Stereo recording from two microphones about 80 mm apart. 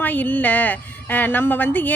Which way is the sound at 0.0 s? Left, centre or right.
Left.